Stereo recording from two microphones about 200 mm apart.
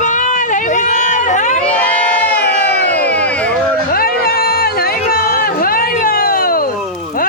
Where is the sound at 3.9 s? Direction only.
50° left (ahead or behind).